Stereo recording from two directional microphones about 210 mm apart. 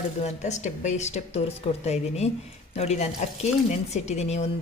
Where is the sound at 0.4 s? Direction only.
35° left (ahead or behind).